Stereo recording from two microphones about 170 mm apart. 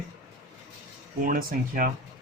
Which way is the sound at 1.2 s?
55° right (ahead or behind).